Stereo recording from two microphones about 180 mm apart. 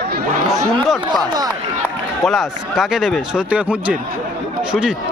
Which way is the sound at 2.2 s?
Centre (ahead or behind).